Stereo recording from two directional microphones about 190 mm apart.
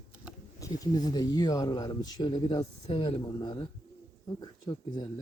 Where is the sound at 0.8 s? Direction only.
20° left (ahead or behind).